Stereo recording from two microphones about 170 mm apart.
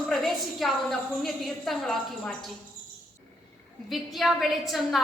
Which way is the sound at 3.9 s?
Centre (ahead or behind).